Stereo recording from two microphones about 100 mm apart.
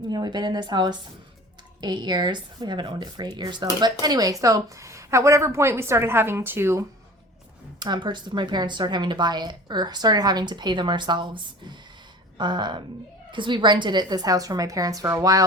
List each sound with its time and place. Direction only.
0.1 s a woman's voice: 45° right (ahead or behind); by 6.8 s 25° right (ahead or behind)
7.8 s a woman's voice: 45° right (ahead or behind)
12.4 s a woman's voice: 50° right (ahead or behind)